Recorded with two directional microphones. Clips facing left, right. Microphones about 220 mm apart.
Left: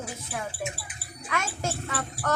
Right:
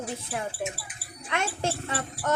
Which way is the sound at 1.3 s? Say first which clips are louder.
Right 2 dB; 30° right (ahead or behind).